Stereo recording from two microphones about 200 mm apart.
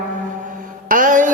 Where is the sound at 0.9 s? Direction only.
40° right (ahead or behind).